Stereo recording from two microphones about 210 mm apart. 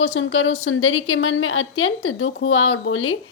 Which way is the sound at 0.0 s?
65° left (ahead or behind).